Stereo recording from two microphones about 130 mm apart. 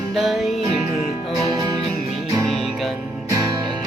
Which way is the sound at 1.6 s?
30° right (ahead or behind).